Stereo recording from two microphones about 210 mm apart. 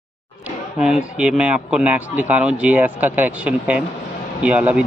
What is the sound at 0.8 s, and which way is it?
Speech, 5° right (ahead or behind).